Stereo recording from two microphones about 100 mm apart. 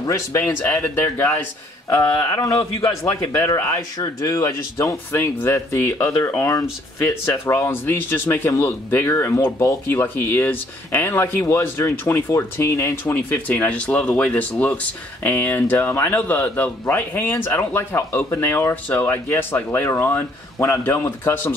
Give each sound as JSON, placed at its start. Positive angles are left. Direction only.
{"t": 0.0, "sound": "speech", "side_deg": 30}
{"t": 2.0, "sound": "a man's voice", "side_deg": 40}
{"t": 3.5, "sound": "speech", "side_deg": 25}
{"t": 4.0, "sound": "speech", "side_deg": 35}
{"t": 13.7, "sound": "speech", "side_deg": 15}